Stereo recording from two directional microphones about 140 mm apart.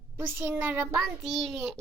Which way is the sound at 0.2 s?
15° right (ahead or behind).